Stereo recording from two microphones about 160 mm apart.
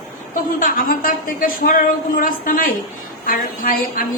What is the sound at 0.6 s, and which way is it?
A woman's voice, 60° left (ahead or behind).